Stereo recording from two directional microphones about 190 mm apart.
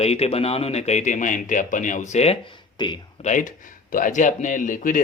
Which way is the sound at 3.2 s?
40° left (ahead or behind).